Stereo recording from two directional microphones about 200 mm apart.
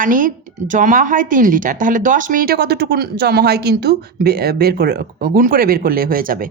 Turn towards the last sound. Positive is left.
turn(degrees=-45)  # may be behind; listen again after turning